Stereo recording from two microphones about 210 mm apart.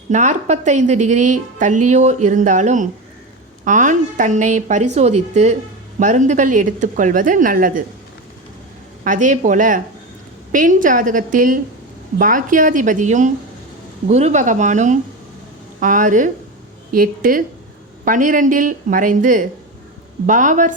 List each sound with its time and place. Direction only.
0.1 s a woman's voice: 35° right (ahead or behind)
9.0 s a woman's voice: 35° right (ahead or behind)